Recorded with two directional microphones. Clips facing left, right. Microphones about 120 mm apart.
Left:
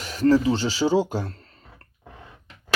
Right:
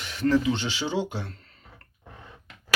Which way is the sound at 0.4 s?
35° left (ahead or behind).